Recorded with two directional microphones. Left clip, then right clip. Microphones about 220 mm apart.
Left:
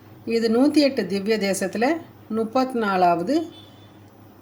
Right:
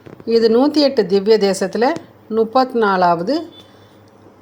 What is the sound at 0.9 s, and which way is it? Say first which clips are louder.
Speech: right 10 dB; 15° right (ahead or behind).